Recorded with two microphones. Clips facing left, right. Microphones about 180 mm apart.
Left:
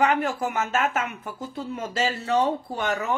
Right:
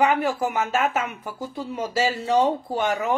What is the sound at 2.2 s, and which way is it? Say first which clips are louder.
Speech: right 3 dB; 15° right (ahead or behind).